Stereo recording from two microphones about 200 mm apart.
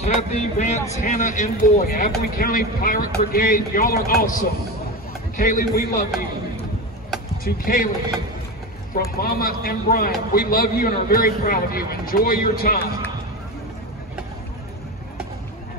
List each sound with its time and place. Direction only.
0.0 s a man's voice: 35° left (ahead or behind)
7.4 s a man's voice: 45° left (ahead or behind)
9.1 s a man's voice: 50° left (ahead or behind)